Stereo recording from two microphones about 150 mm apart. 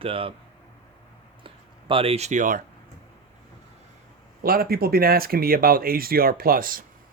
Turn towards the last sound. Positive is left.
turn(degrees=-70)  # may be behind; listen again after turning